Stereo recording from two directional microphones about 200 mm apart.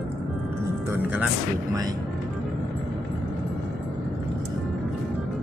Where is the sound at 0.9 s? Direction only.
10° right (ahead or behind).